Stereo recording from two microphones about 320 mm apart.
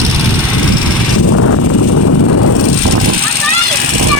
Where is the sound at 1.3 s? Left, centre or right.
Left.